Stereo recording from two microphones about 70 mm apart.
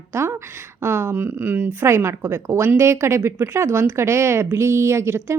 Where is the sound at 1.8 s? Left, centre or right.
Right.